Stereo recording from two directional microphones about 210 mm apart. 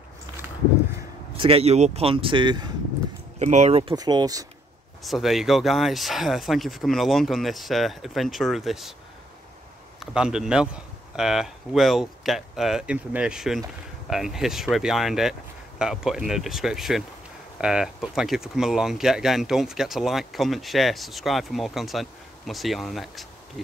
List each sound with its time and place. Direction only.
1.3 s speech: 25° right (ahead or behind)
3.3 s speech: 35° right (ahead or behind); by 4.5 s 20° right (ahead or behind)
5.0 s speech: centre (ahead or behind)
9.9 s speech: 5° right (ahead or behind)